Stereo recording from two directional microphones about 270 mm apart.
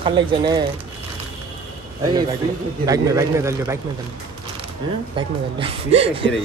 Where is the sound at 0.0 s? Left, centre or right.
Centre.